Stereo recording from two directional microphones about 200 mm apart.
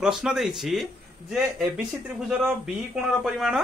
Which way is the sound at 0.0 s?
5° right (ahead or behind).